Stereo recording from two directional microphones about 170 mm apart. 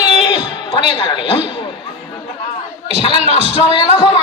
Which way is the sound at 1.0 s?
30° left (ahead or behind).